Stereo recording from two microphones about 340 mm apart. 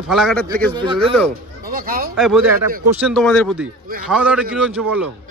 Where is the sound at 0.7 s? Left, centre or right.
Centre.